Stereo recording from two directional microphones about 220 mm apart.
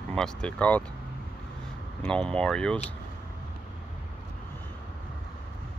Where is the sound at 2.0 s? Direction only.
5° left (ahead or behind).